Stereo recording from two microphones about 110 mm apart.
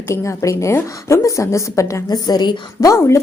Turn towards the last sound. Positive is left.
turn(degrees=30)  # may be behind; listen again after turning